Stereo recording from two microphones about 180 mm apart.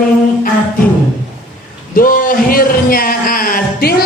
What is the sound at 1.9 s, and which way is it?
Speech, 50° left (ahead or behind).